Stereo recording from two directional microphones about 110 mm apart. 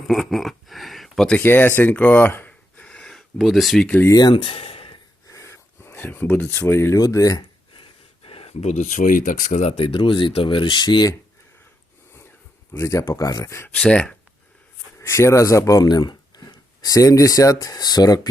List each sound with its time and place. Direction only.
0.1 s a sound: centre (ahead or behind)
1.4 s speech: 20° left (ahead or behind); by 3.9 s centre (ahead or behind)
4.3 s a sound: 60° left (ahead or behind)
5.3 s speech: 25° left (ahead or behind)
7.8 s speech: 60° left (ahead or behind); by 9.7 s 90° left
9.7 s speech: 50° left (ahead or behind)
12.7 s speech: 25° left (ahead or behind)
13.7 s speech: 10° left (ahead or behind)
14.9 s speech: 25° left (ahead or behind)